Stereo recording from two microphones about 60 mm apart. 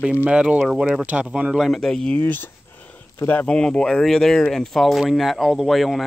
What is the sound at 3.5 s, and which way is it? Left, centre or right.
Speech, centre.